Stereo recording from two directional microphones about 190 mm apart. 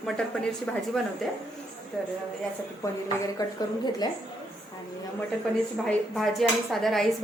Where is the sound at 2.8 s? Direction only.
15° left (ahead or behind).